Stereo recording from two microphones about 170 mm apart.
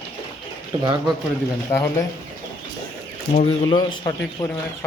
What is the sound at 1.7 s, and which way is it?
Speech, 15° left (ahead or behind).